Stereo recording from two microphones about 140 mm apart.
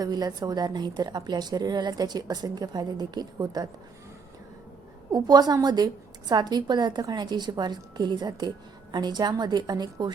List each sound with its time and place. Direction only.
0.0 s a woman's voice: 25° right (ahead or behind)
5.1 s a woman's voice: 30° right (ahead or behind)